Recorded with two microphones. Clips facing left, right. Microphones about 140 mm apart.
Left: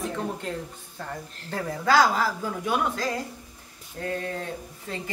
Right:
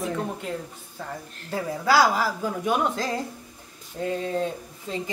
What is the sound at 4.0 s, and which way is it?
Speech, 20° right (ahead or behind).